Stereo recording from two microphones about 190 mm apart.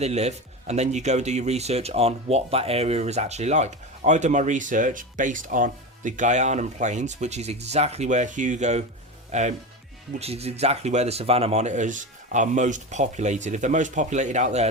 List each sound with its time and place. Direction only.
0.0 s speech: 35° right (ahead or behind)